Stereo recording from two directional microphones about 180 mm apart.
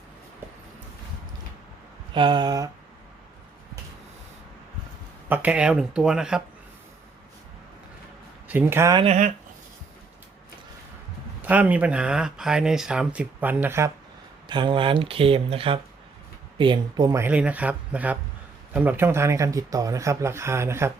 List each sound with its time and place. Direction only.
2.1 s speech: 25° right (ahead or behind)
5.3 s speech: 10° right (ahead or behind)
8.4 s speech: 10° right (ahead or behind)
9.0 s speech: 40° right (ahead or behind)
11.4 s speech: 10° right (ahead or behind)
14.4 s speech: 25° right (ahead or behind)
17.2 s speech: 10° right (ahead or behind)